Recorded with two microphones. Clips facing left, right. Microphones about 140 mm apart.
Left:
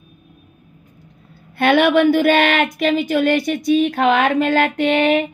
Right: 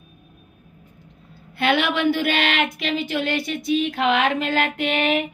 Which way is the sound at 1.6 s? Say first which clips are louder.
Left 7 dB; 55° left (ahead or behind).